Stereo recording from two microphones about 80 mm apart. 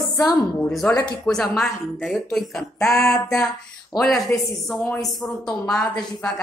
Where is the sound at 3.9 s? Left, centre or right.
Centre.